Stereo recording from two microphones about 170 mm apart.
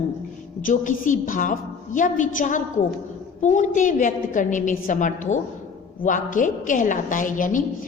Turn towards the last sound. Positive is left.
turn(degrees=50)  # may be behind; listen again after turning